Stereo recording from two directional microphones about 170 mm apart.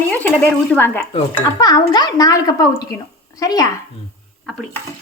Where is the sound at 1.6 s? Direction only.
25° left (ahead or behind).